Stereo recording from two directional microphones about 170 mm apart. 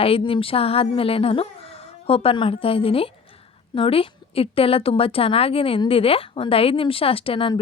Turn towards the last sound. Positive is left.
turn(degrees=30)  # may be behind; listen again after turning